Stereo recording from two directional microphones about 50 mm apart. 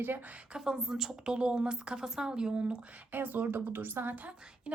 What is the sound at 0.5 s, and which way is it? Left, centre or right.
Speech, centre.